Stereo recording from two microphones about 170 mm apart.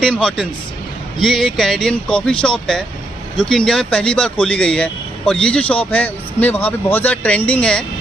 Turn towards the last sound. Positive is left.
turn(degrees=5)  # may be behind; listen again after turning